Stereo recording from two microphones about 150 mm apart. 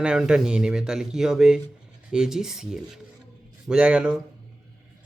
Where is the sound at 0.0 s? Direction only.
5° right (ahead or behind).